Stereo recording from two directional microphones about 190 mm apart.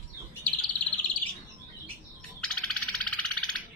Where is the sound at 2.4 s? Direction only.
5° left (ahead or behind).